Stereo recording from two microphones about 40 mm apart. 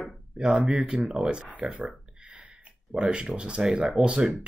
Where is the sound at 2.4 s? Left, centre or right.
Centre.